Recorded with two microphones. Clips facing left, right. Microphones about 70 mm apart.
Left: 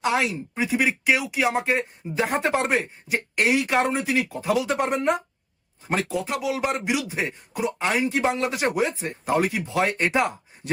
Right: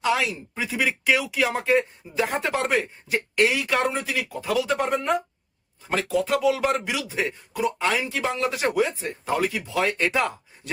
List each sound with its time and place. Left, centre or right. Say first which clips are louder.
0.0 s speech: even; left
0.7 s speech: even; centre
1.6 s speech: right 3 dB; left
6.1 s speech: right 4 dB; centre